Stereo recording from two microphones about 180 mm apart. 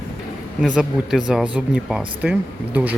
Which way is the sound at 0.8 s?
5° right (ahead or behind).